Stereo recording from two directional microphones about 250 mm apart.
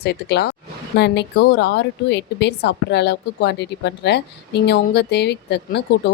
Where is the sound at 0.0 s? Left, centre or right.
Left.